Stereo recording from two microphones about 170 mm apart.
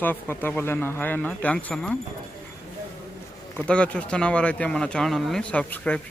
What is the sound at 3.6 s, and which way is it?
Speech, 5° left (ahead or behind).